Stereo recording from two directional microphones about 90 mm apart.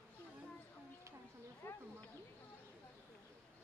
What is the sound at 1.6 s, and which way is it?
Speech, 25° left (ahead or behind).